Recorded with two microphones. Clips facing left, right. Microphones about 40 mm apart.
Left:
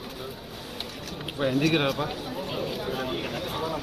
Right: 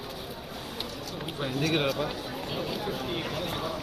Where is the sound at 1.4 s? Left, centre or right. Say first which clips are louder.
Left 4 dB; left.